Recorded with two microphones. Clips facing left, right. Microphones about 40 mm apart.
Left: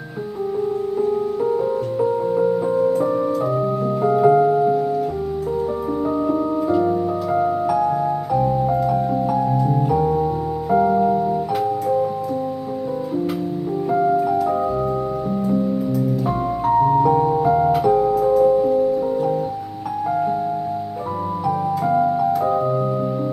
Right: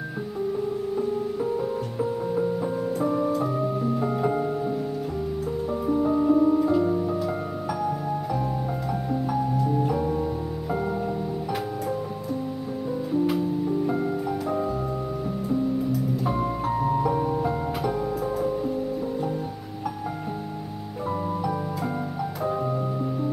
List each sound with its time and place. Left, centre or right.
2.0 s music: centre
4.0 s music: centre
5.9 s music: centre
10.7 s music: centre
13.8 s music: centre
16.7 s music: centre
18.5 s music: centre
21.5 s music: centre